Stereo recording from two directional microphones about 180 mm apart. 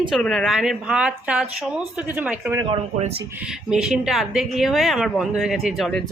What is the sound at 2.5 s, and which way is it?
Speech, 25° right (ahead or behind).